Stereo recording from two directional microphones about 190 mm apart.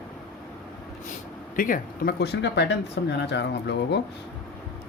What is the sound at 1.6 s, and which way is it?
Speech, 50° left (ahead or behind).